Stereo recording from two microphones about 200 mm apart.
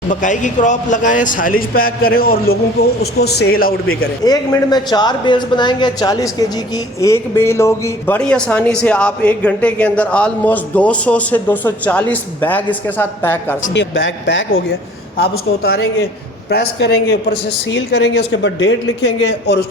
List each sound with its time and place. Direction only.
0.1 s speech: 40° left (ahead or behind)
4.2 s a man's voice: 20° left (ahead or behind)
13.7 s speech: 60° left (ahead or behind)
15.6 s speech: 55° left (ahead or behind)